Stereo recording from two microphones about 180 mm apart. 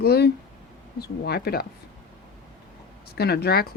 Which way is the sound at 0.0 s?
60° left (ahead or behind).